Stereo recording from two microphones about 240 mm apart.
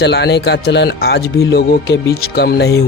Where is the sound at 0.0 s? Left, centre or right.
Left.